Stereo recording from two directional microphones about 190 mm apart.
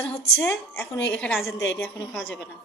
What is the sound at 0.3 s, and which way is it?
A woman's voice, 10° left (ahead or behind).